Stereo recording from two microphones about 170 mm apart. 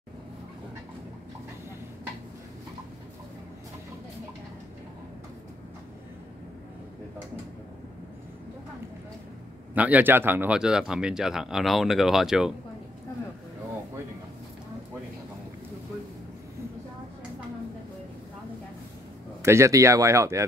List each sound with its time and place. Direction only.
9.8 s speech: 10° right (ahead or behind)
19.4 s speech: 15° right (ahead or behind)